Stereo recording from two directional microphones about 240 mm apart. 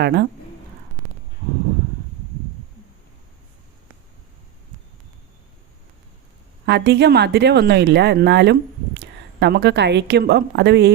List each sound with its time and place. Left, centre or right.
0.0 s speech: right
6.7 s a woman's voice: right